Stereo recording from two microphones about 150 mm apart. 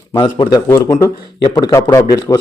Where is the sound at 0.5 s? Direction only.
15° left (ahead or behind).